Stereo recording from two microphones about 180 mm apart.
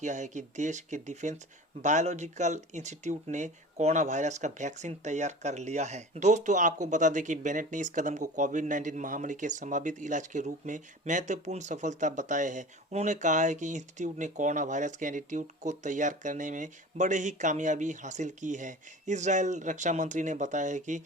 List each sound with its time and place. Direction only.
0.0 s speech: 40° right (ahead or behind)